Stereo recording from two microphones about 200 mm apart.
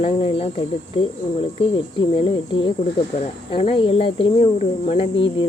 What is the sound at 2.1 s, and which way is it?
Speech, 25° left (ahead or behind).